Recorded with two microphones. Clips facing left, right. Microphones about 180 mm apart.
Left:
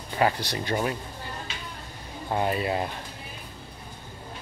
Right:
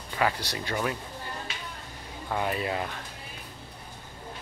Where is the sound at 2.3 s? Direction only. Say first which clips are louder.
Left 3 dB; 30° left (ahead or behind).